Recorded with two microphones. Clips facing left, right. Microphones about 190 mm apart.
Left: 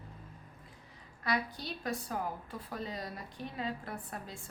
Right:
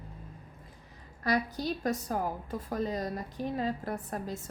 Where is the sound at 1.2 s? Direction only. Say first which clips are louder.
Right 6 dB; 40° right (ahead or behind).